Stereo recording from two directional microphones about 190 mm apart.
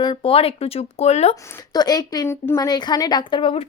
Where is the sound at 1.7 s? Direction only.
20° left (ahead or behind).